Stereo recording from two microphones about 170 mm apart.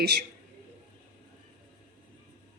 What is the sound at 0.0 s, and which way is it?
Speech, 70° right (ahead or behind).